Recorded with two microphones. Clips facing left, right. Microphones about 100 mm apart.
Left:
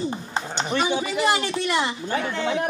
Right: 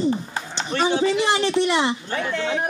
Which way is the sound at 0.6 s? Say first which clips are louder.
Right 3 dB; 15° left (ahead or behind).